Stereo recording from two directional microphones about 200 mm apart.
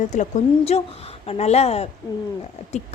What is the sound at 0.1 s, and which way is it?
A woman's voice, 35° left (ahead or behind).